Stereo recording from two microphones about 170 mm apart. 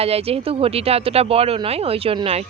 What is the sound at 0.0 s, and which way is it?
Speech, 35° right (ahead or behind).